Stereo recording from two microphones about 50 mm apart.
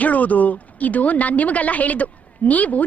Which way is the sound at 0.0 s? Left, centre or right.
Left.